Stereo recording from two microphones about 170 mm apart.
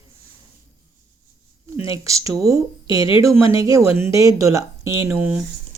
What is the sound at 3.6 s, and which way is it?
Speech, 20° right (ahead or behind).